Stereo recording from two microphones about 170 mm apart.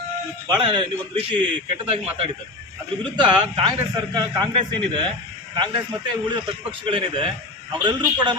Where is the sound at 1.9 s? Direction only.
35° right (ahead or behind).